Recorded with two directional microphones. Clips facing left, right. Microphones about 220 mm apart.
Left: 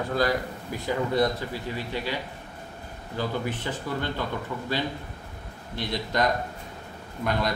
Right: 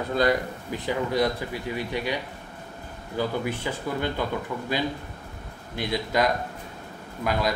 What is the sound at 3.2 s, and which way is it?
Speech, 10° right (ahead or behind).